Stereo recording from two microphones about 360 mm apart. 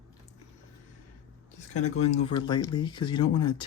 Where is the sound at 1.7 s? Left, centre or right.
Centre.